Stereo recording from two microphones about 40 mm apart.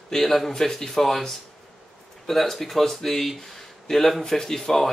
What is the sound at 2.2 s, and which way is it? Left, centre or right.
Speech, centre.